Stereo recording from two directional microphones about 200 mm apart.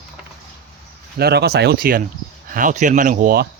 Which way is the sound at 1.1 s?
55° right (ahead or behind).